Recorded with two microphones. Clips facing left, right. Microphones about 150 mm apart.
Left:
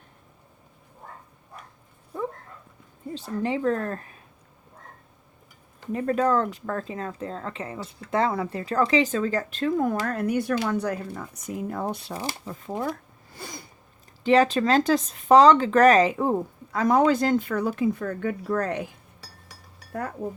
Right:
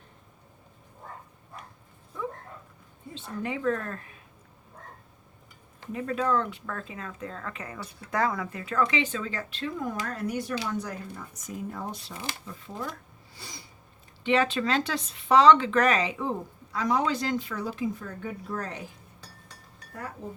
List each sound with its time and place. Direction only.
3.2 s speech: 35° left (ahead or behind)
5.9 s speech: 40° left (ahead or behind); by 12.1 s 60° left (ahead or behind)
12.1 s speech: 40° left (ahead or behind)
13.3 s sneeze: 50° left (ahead or behind)
14.3 s speech: 40° left (ahead or behind); by 18.9 s 65° left (ahead or behind)
19.9 s speech: 55° left (ahead or behind)